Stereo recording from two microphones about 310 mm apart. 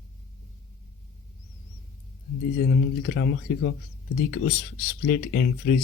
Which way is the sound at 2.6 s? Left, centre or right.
Left.